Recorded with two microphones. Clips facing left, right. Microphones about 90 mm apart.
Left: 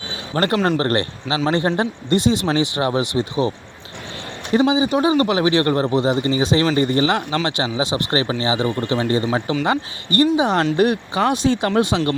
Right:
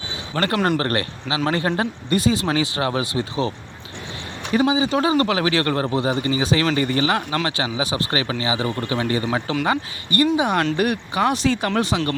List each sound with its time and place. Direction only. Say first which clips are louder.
0.3 s speech: left 2 dB; 30° left (ahead or behind)
4.5 s speech: left 2 dB; 20° left (ahead or behind)